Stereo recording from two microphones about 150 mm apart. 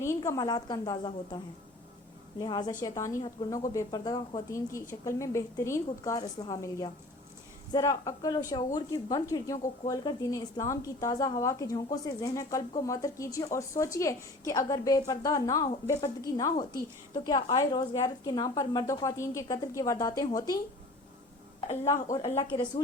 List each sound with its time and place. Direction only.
0.0 s a woman's voice: 20° left (ahead or behind)
2.4 s a woman's voice: 30° left (ahead or behind)